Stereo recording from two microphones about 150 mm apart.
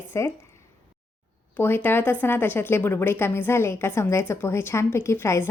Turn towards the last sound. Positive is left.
turn(degrees=15)  # may be behind; listen again after turning